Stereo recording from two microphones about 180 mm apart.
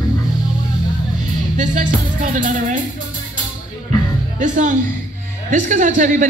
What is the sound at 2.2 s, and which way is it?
Speech, 45° right (ahead or behind).